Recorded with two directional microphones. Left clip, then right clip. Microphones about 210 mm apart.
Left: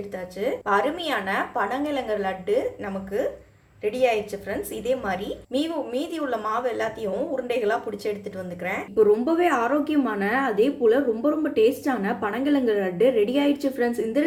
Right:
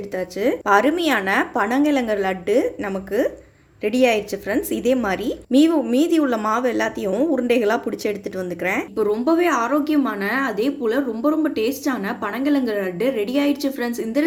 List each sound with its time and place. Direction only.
0.2 s a woman's voice: 45° right (ahead or behind)
9.0 s speech: centre (ahead or behind)